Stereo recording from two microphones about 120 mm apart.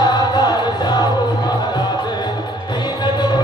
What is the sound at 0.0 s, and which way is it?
Music, 35° left (ahead or behind).